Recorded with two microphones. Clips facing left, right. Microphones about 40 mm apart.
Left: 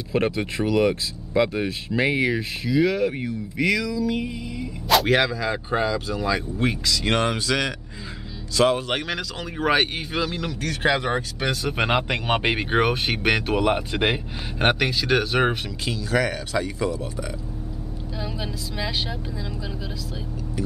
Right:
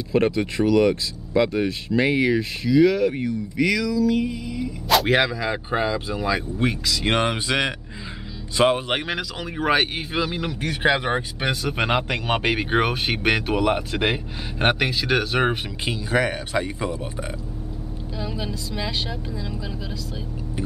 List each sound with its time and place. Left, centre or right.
0.1 s speech: centre
11.6 s speech: centre
15.8 s speech: right
18.2 s speech: centre